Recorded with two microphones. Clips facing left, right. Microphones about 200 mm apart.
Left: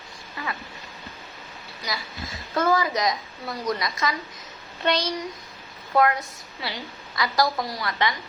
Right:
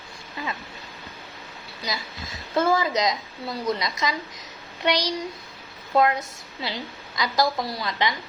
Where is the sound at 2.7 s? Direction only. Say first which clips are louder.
Left 1 dB; 25° right (ahead or behind).